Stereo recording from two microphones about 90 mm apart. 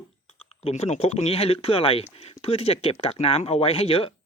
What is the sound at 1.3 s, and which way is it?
Speech, 90° left.